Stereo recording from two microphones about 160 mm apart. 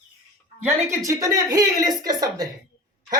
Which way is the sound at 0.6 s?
20° right (ahead or behind).